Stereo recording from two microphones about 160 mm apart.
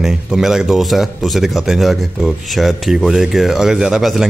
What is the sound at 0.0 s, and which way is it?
Speech, 5° right (ahead or behind).